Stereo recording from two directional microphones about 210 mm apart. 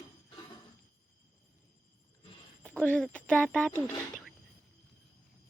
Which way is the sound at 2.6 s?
5° left (ahead or behind).